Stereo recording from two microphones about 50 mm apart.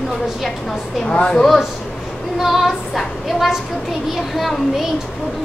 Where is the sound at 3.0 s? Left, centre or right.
Centre.